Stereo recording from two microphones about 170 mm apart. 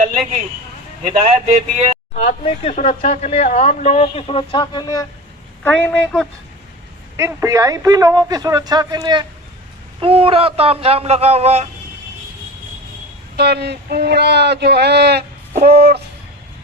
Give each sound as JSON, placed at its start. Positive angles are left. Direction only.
{"t": 1.3, "sound": "a man's voice", "side_deg": -40}
{"t": 2.1, "sound": "speech", "side_deg": 35}
{"t": 5.6, "sound": "a woman's voice", "side_deg": 5}
{"t": 7.2, "sound": "a man's voice", "side_deg": -15}
{"t": 13.3, "sound": "speech", "side_deg": -75}